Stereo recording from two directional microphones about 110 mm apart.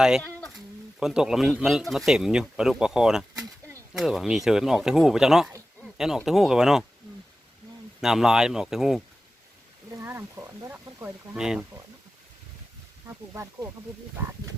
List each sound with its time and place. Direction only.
0.5 s speech: 5° right (ahead or behind)
8.0 s speech: 5° right (ahead or behind)
9.9 s speech: 20° right (ahead or behind)
11.3 s speech: 5° right (ahead or behind)
13.1 s speech: 25° right (ahead or behind)